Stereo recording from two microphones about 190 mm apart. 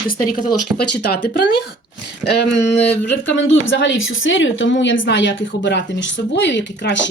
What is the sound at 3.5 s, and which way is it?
Speech, 75° left (ahead or behind).